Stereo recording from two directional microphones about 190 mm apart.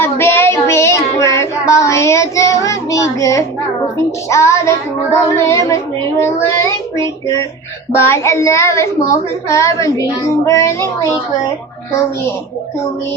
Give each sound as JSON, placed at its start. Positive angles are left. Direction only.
{"t": 0.0, "sound": "child singing", "side_deg": 10}
{"t": 4.3, "sound": "speech", "side_deg": 15}